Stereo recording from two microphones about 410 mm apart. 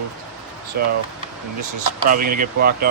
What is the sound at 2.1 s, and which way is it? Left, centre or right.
Speech, centre.